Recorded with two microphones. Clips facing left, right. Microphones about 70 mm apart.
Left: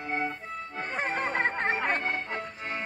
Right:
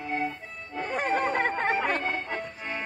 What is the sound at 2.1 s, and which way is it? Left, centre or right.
Music, centre.